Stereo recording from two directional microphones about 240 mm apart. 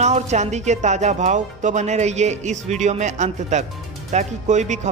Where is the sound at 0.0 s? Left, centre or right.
Right.